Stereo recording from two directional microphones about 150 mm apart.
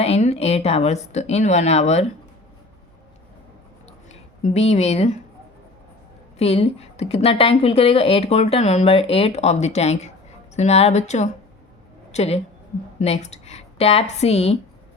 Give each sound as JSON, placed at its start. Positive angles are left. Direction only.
{"t": 0.0, "sound": "speech", "side_deg": 45}
{"t": 4.4, "sound": "speech", "side_deg": 45}
{"t": 6.4, "sound": "a woman's voice", "side_deg": 45}